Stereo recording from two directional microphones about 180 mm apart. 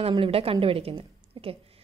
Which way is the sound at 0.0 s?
30° right (ahead or behind).